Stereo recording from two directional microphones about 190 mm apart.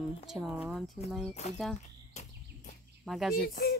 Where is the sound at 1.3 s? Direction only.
35° left (ahead or behind).